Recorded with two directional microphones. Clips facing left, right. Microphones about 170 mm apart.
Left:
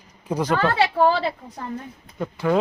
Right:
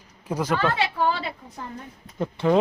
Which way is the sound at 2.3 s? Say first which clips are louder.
Right 1 dB; 20° right (ahead or behind).